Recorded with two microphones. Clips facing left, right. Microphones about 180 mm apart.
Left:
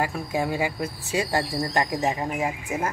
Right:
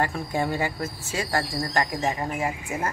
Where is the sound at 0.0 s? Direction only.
5° left (ahead or behind).